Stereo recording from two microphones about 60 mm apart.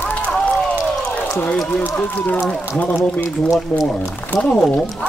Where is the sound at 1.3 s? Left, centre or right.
Left.